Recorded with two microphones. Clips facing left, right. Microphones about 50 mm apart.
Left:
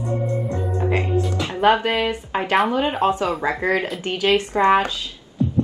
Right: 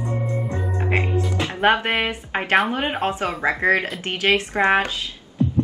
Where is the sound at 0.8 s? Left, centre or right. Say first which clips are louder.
Left 1 dB; right.